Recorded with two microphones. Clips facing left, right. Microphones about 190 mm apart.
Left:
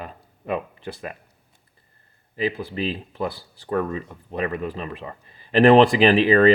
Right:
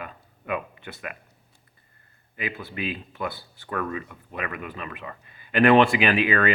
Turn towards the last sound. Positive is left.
turn(degrees=30)  # may be behind; listen again after turning